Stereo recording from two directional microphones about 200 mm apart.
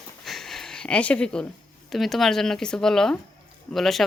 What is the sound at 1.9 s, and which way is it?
A woman's voice, centre (ahead or behind).